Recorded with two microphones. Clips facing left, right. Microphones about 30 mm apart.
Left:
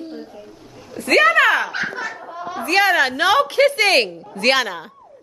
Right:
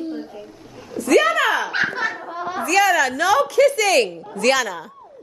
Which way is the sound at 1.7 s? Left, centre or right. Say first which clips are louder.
Right 3 dB; right.